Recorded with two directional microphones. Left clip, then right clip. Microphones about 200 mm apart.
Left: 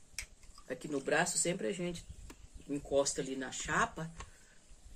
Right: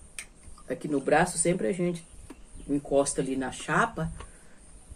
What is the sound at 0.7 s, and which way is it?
Speech, 5° left (ahead or behind).